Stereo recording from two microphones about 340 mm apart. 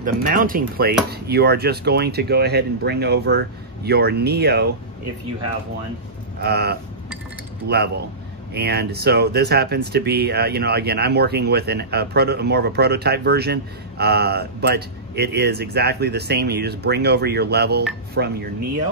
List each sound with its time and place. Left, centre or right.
0.0 s speech: right
6.4 s speech: right